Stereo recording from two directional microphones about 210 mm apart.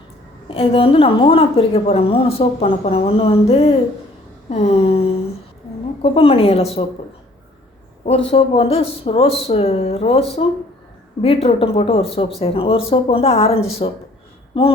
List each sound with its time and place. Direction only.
0.4 s a woman's voice: 25° left (ahead or behind)
8.3 s a woman's voice: 25° left (ahead or behind)